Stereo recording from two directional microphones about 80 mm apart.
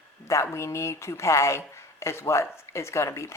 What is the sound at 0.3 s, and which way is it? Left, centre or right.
Speech, left.